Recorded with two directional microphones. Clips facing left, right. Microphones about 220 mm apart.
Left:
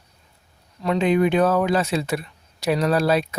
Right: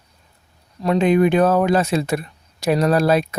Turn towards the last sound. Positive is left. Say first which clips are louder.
# right 3 dB
turn(degrees=-45)  # may be behind; listen again after turning